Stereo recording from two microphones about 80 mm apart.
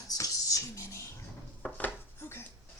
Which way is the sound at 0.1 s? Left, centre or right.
Left.